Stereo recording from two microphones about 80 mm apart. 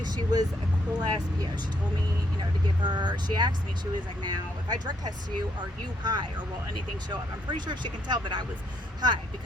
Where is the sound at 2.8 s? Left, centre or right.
Right.